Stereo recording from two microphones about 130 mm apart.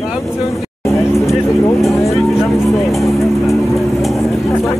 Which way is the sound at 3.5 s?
Centre (ahead or behind).